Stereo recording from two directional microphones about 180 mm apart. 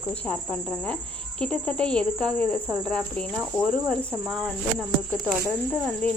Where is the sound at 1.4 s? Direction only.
5° left (ahead or behind).